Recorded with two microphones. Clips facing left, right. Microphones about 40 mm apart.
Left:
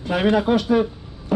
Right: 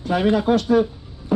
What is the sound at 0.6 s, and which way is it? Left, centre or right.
Speech, centre.